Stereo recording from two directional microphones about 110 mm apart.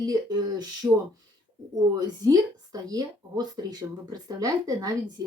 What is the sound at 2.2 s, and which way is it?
Speech, 30° right (ahead or behind).